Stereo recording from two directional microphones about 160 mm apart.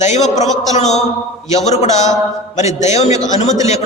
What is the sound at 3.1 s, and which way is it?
Speech, 20° right (ahead or behind).